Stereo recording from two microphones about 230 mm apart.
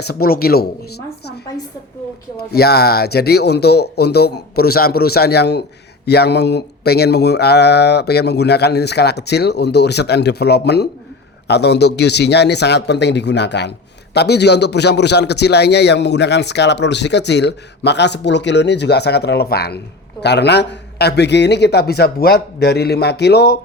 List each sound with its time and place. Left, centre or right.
0.0 s speech: left
2.5 s a man's voice: left